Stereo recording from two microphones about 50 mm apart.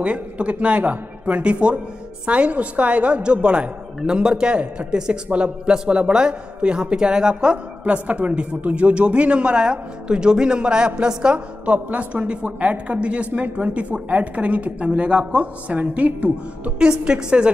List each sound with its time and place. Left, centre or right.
0.0 s a woman's voice: right